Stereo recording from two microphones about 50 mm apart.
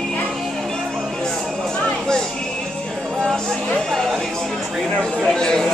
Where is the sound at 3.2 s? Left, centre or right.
Centre.